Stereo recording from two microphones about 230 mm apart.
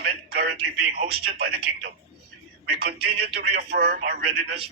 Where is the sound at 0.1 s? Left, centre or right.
Right.